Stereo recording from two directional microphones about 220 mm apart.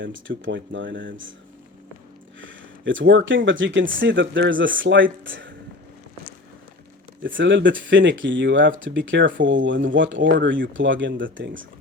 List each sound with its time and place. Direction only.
0.0 s speech: 60° right (ahead or behind)
2.4 s speech: 60° right (ahead or behind)
7.3 s speech: 55° right (ahead or behind)